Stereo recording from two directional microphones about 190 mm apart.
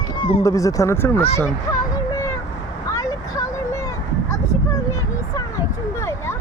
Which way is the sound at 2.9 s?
15° left (ahead or behind).